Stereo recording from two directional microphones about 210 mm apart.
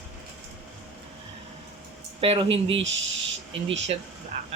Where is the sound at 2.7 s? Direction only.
60° right (ahead or behind).